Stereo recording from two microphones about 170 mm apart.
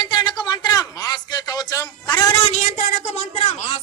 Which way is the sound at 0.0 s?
25° left (ahead or behind).